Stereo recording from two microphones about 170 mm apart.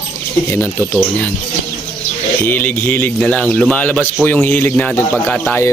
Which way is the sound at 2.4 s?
10° left (ahead or behind).